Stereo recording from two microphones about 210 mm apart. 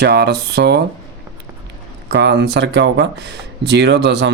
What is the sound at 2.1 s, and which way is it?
Speech, 55° right (ahead or behind).